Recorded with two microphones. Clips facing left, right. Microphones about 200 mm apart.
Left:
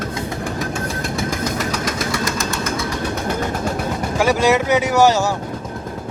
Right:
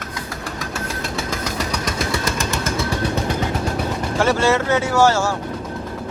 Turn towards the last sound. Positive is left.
turn(degrees=15)  # may be behind; listen again after turning